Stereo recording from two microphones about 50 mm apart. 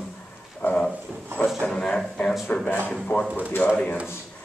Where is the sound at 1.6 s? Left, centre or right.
Centre.